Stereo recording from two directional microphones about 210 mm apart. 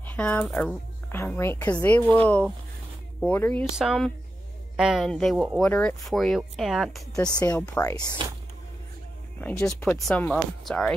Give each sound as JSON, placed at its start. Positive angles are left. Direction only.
{"t": 0.0, "sound": "speech", "side_deg": 5}
{"t": 3.7, "sound": "speech", "side_deg": 0}
{"t": 7.6, "sound": "speech", "side_deg": 15}
{"t": 9.4, "sound": "speech", "side_deg": 10}